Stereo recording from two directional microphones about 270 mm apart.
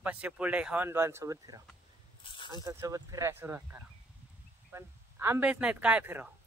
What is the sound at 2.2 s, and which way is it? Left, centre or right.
Speech, centre.